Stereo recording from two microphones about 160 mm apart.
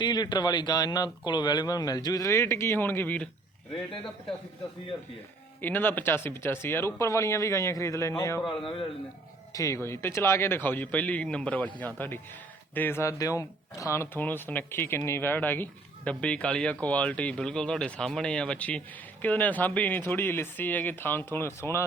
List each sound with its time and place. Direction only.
0.0 s speech: 25° left (ahead or behind); by 3.2 s 10° left (ahead or behind)
5.6 s speech: 10° left (ahead or behind)
8.4 s a man's voice: 35° left (ahead or behind)
9.5 s speech: 20° left (ahead or behind)